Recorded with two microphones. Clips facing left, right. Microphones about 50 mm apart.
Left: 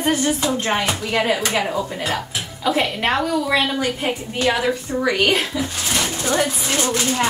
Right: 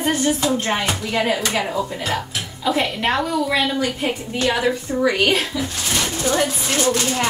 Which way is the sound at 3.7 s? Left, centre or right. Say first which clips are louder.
Even; left.